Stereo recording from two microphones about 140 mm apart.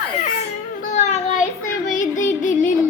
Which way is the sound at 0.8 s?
55° left (ahead or behind).